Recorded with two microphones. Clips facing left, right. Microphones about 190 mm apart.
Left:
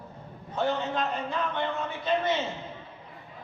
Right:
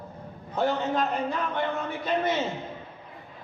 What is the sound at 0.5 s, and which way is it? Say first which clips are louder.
A man's voice: right 2 dB; 40° right (ahead or behind).